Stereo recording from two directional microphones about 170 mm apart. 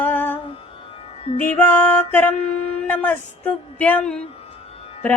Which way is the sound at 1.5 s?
10° left (ahead or behind).